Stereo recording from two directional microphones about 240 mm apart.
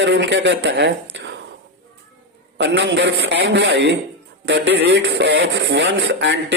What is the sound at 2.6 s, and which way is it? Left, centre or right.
A man's voice, right.